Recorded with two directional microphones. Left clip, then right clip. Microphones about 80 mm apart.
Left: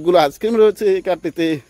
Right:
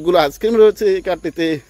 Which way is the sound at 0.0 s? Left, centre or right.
Left.